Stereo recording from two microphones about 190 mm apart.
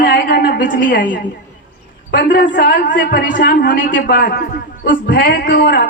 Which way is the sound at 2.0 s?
55° left (ahead or behind).